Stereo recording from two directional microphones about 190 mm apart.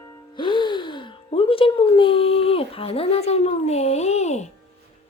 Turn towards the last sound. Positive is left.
turn(degrees=35)  # may be behind; listen again after turning